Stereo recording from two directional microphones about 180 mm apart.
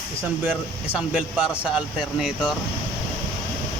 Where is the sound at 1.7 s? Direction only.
5° right (ahead or behind).